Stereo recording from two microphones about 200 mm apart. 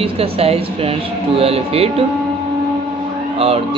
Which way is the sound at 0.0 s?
30° right (ahead or behind).